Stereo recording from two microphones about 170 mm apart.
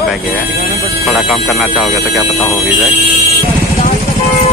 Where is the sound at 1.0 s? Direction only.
Centre (ahead or behind).